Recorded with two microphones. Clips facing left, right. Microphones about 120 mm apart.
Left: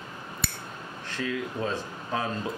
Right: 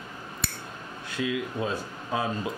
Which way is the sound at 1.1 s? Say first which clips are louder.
Right 2 dB; 10° right (ahead or behind).